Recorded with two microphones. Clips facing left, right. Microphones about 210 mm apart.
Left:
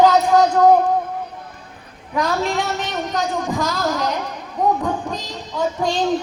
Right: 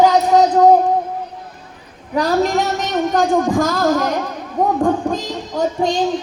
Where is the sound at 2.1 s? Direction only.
35° right (ahead or behind).